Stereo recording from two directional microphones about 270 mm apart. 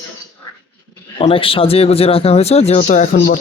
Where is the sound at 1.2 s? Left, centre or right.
Centre.